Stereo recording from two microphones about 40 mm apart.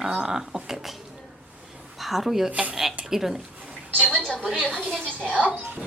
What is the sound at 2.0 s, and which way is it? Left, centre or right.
Speech, centre.